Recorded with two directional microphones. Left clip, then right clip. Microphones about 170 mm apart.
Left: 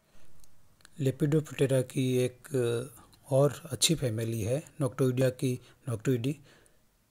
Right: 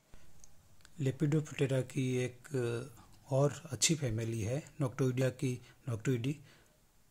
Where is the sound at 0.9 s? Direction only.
25° left (ahead or behind).